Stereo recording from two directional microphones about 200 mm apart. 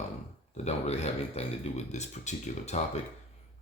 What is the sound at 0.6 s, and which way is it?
Speech, 35° left (ahead or behind).